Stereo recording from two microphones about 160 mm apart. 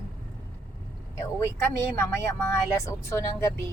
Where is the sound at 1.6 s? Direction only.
15° left (ahead or behind).